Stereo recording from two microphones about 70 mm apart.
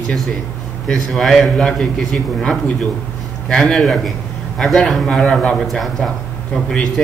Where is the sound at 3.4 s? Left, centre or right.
Centre.